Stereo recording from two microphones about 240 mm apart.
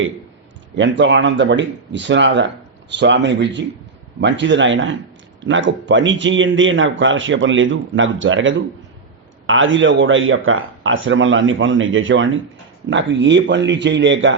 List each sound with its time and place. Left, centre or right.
0.8 s speech: right